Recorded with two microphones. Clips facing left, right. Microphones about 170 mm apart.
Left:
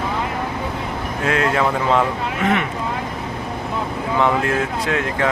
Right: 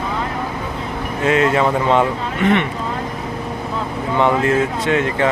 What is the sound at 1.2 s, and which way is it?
Speech, centre (ahead or behind).